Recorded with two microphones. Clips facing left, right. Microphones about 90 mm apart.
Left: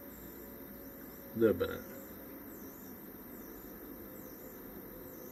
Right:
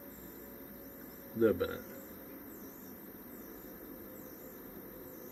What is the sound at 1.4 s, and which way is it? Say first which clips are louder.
Speech: even; 10° right (ahead or behind).